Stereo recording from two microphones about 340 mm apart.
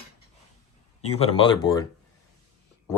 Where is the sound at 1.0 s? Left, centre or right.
Centre.